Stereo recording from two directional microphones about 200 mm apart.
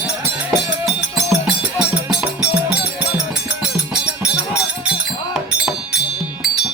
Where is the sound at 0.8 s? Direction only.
Centre (ahead or behind).